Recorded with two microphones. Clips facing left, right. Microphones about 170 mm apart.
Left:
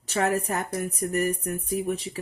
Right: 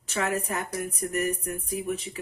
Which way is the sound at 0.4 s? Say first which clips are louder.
Left 3 dB; 40° left (ahead or behind).